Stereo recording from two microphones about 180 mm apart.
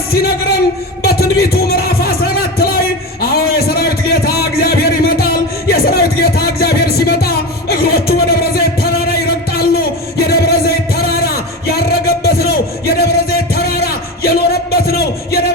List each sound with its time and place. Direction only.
0.1 s speech: 60° left (ahead or behind)
1.0 s music: 60° left (ahead or behind)